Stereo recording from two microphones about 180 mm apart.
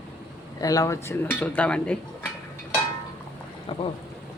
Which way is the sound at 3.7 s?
25° left (ahead or behind).